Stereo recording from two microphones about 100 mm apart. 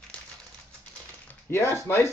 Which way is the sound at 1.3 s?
25° left (ahead or behind).